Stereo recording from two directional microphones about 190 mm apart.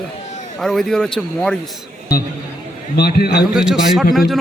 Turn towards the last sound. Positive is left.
turn(degrees=0)  # may be behind; listen again after turning